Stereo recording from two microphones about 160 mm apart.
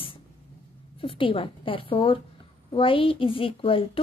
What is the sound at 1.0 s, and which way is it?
A woman's voice, 35° left (ahead or behind).